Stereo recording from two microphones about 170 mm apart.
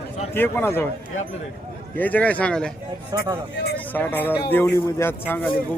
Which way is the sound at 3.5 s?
70° left (ahead or behind).